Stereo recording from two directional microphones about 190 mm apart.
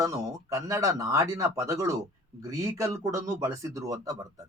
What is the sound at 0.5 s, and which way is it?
A man's voice, 15° right (ahead or behind).